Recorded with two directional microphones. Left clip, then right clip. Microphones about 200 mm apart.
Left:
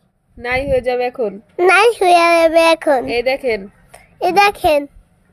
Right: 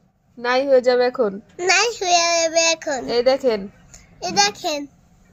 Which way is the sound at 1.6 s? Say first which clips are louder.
Left 8 dB; 45° left (ahead or behind).